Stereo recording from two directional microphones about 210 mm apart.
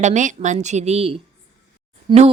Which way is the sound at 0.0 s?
35° right (ahead or behind).